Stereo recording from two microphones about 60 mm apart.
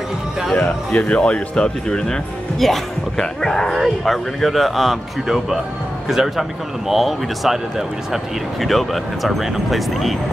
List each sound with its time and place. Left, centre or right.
0.6 s speech: left; by 10.1 s centre